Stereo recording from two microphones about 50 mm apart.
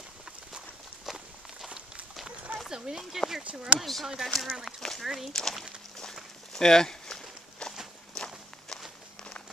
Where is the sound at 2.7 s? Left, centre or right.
Centre.